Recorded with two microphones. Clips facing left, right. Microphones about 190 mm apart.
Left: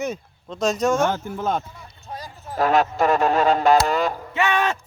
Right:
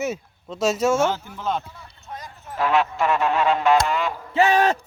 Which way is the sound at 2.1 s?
35° left (ahead or behind).